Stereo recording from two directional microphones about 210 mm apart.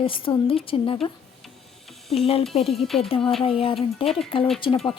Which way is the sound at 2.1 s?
25° left (ahead or behind).